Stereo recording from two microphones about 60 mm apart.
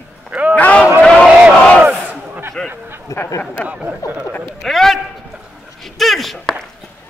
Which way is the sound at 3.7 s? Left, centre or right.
Right.